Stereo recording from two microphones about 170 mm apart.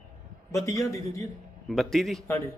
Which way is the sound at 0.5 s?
20° left (ahead or behind).